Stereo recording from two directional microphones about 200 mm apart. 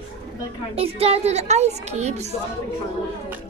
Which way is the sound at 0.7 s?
30° right (ahead or behind).